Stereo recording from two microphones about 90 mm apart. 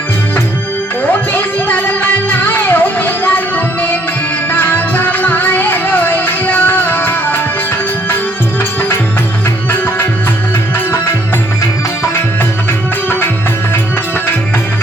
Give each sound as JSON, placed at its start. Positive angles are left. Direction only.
{"t": 1.3, "sound": "music", "side_deg": 20}
{"t": 4.5, "sound": "music", "side_deg": 20}